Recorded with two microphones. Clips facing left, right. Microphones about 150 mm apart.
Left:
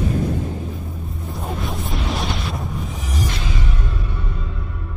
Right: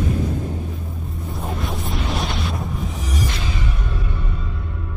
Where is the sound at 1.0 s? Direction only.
Centre (ahead or behind).